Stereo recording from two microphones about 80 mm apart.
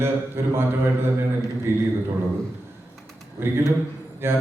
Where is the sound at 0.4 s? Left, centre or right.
Right.